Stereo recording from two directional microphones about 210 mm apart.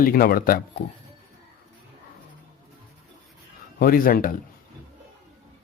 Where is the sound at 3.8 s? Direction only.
45° left (ahead or behind).